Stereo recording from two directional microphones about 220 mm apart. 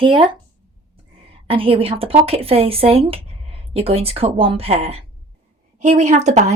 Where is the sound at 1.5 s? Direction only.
25° right (ahead or behind).